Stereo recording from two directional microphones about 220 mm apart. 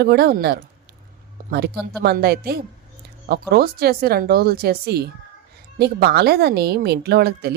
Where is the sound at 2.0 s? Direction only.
45° right (ahead or behind).